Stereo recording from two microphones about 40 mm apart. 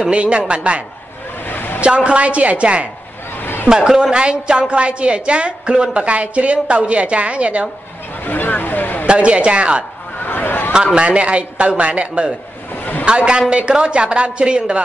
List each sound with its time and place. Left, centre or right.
0.1 s a woman's voice: right
1.4 s a sound: left
2.0 s speech: right
3.3 s a sound: left
3.6 s a woman's voice: centre; by 7.6 s right
8.2 s speech: left
9.0 s a woman's voice: right
10.2 s a sound: left
11.0 s a woman's voice: right